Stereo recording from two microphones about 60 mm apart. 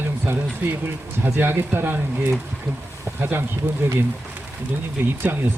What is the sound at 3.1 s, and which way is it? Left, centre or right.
Speech, right.